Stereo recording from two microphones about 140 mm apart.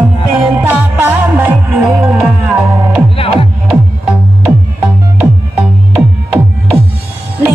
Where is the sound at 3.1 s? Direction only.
40° left (ahead or behind).